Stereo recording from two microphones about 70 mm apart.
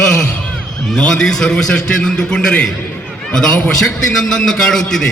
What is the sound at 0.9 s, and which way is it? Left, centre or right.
A man's voice, centre.